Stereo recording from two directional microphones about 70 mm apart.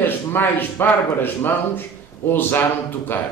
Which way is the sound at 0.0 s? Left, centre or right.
Left.